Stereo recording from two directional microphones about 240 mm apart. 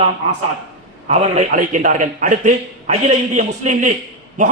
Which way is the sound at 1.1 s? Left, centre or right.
Right.